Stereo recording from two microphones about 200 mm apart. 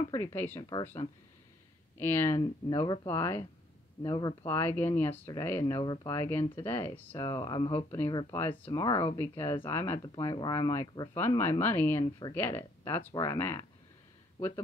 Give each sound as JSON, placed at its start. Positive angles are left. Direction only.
{"t": 0.1, "sound": "speech", "side_deg": 15}
{"t": 2.0, "sound": "speech", "side_deg": 10}
{"t": 4.5, "sound": "speech", "side_deg": 10}
{"t": 7.2, "sound": "speech", "side_deg": 20}
{"t": 8.8, "sound": "speech", "side_deg": 25}
{"t": 9.7, "sound": "speech", "side_deg": 15}
{"t": 12.0, "sound": "speech", "side_deg": 20}
{"t": 12.4, "sound": "speech", "side_deg": 10}